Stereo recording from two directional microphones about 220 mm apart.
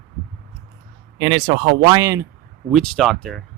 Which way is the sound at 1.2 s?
20° right (ahead or behind).